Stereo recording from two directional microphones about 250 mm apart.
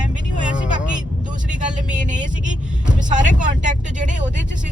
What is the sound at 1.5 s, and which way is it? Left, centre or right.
Speech, right.